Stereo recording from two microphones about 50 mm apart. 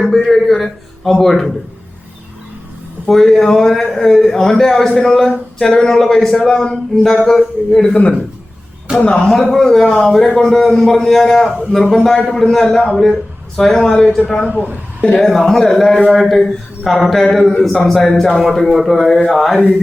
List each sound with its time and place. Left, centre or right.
0.0 s a man's voice: centre
3.1 s speech: centre
9.1 s a man's voice: centre
15.1 s a man's voice: centre